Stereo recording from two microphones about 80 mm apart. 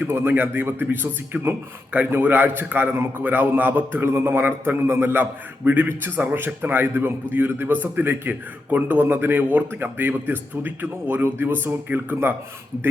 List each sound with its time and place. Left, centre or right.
0.1 s a man's voice: right